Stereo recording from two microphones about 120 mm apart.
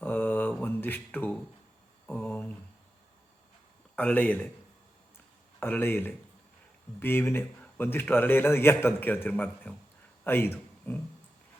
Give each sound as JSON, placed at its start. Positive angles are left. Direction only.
{"t": 0.0, "sound": "mantra", "side_deg": 15}
{"t": 2.0, "sound": "a sound", "side_deg": 15}
{"t": 3.9, "sound": "speech", "side_deg": 10}
{"t": 5.5, "sound": "a man's voice", "side_deg": 15}